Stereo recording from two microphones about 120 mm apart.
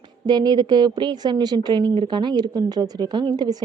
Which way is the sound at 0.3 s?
35° right (ahead or behind).